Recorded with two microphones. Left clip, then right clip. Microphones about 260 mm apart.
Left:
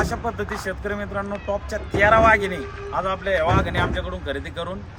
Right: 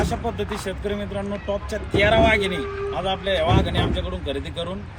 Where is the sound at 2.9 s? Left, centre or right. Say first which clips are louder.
Left 2 dB; centre.